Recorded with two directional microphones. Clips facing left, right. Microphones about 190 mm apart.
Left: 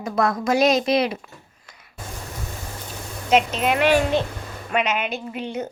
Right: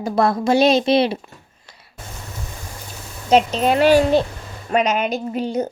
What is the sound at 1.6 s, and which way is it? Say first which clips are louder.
Music: right 2 dB; 30° right (ahead or behind).